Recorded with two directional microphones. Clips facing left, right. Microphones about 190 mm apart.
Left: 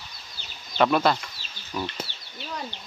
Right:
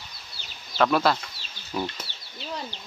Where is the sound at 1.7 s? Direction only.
25° right (ahead or behind).